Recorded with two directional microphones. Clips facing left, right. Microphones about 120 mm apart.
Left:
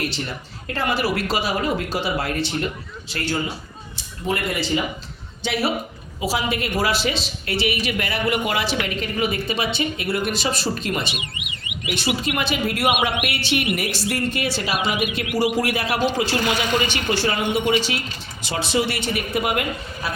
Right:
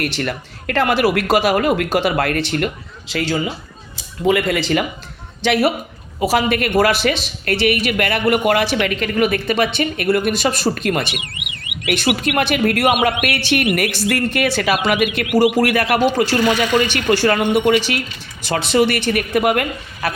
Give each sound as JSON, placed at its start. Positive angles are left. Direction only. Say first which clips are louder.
{"t": 0.0, "sound": "speech", "louder": "right 5 dB", "side_deg": -70}
{"t": 3.1, "sound": "speech", "louder": "right 5 dB", "side_deg": -90}
{"t": 6.1, "sound": "a woman's voice", "louder": "right 7 dB", "side_deg": -55}